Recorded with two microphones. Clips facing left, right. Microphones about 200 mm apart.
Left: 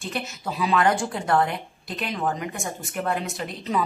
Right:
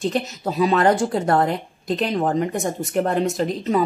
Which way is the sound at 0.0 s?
40° right (ahead or behind).